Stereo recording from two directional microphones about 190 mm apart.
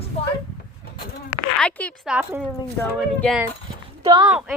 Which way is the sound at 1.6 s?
5° left (ahead or behind).